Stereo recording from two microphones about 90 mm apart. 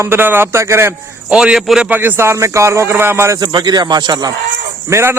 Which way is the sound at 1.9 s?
20° right (ahead or behind).